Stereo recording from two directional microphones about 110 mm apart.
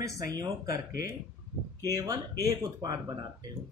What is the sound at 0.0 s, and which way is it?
Speech, 30° right (ahead or behind).